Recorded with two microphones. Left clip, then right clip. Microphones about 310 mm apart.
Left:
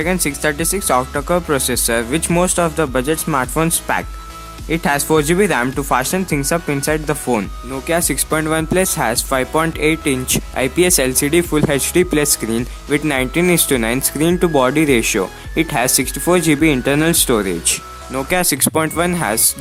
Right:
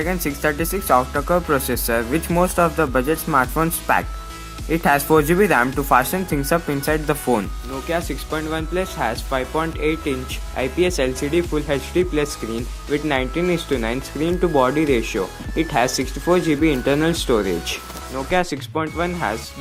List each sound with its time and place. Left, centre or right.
0.0 s speech: left